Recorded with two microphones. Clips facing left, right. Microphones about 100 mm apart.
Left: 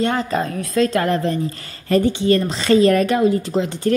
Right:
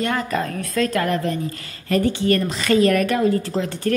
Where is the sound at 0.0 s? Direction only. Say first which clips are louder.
Left 3 dB; 25° left (ahead or behind).